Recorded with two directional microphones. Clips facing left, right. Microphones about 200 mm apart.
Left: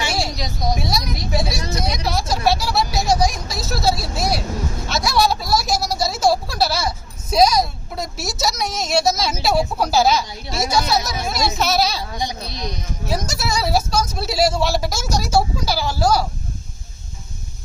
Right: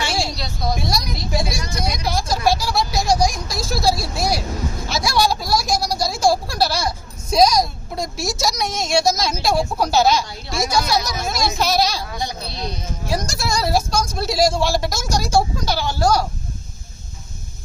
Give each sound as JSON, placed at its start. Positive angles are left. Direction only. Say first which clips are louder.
{"t": 0.3, "sound": "speech", "louder": "left 1 dB", "side_deg": 15}
{"t": 0.7, "sound": "a woman's voice", "louder": "even", "side_deg": 0}
{"t": 12.1, "sound": "speech", "louder": "left 1 dB", "side_deg": 15}
{"t": 13.1, "sound": "a man's voice", "louder": "even", "side_deg": 5}